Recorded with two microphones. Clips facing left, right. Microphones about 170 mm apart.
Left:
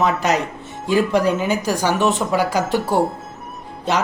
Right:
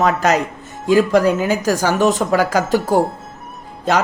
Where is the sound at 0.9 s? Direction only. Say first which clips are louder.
Right 4 dB; 40° right (ahead or behind).